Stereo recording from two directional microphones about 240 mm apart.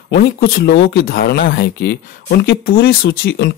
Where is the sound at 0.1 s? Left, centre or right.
Left.